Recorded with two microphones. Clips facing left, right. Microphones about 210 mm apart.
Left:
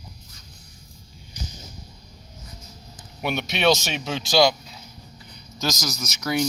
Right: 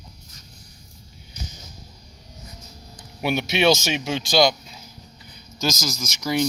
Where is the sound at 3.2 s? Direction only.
5° right (ahead or behind).